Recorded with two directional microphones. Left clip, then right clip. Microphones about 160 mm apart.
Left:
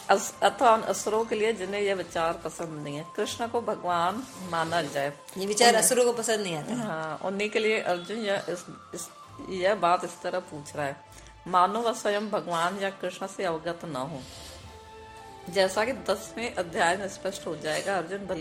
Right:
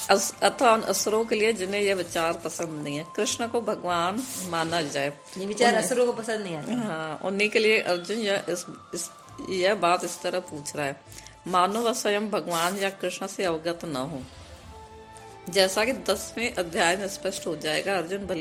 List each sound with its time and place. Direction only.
0.1 s a woman's voice: 30° right (ahead or behind)
5.4 s a woman's voice: 45° left (ahead or behind)
6.8 s a woman's voice: 30° right (ahead or behind)
15.4 s a woman's voice: 30° right (ahead or behind)